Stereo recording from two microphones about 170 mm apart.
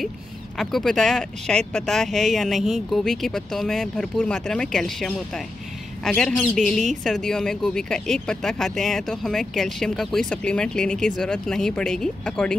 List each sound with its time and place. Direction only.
0.6 s speech: centre (ahead or behind)